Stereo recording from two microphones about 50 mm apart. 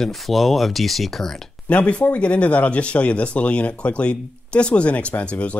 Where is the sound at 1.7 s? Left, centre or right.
Left.